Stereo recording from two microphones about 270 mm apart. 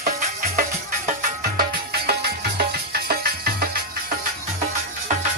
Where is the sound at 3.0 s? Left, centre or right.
Right.